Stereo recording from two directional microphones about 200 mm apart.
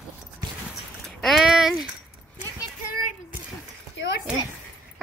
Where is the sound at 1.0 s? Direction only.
Centre (ahead or behind).